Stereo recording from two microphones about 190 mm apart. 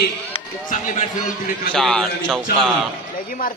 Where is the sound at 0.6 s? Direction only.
45° left (ahead or behind).